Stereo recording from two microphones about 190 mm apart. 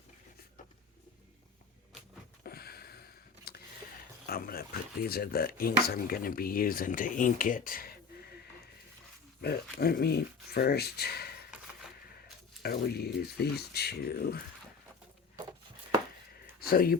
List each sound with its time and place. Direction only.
2.4 s a sound: 55° left (ahead or behind)
4.3 s speech: 50° left (ahead or behind)
9.4 s speech: 55° left (ahead or behind)
12.6 s speech: 55° left (ahead or behind)
16.6 s speech: 50° left (ahead or behind)